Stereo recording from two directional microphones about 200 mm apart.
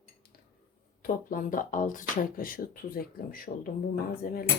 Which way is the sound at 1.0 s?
45° left (ahead or behind).